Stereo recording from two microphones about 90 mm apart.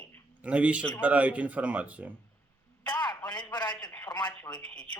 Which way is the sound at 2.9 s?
45° left (ahead or behind).